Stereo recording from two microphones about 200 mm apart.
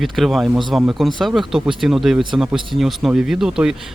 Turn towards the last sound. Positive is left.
turn(degrees=-5)  # may be behind; listen again after turning